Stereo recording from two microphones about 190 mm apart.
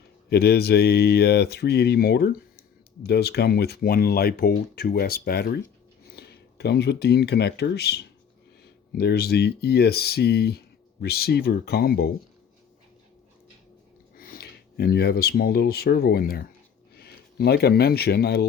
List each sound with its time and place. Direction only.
0.3 s speech: 60° left (ahead or behind)
14.2 s a man's voice: 50° left (ahead or behind)